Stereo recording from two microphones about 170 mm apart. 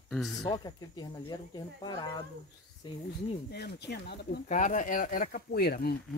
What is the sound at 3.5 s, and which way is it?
Speech, 75° left (ahead or behind).